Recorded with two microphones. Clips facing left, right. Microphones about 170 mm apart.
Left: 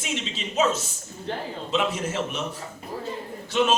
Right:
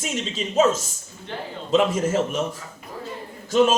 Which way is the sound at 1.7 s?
45° right (ahead or behind).